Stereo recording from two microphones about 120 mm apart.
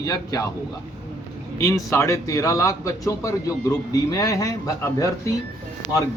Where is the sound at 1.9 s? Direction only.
25° left (ahead or behind).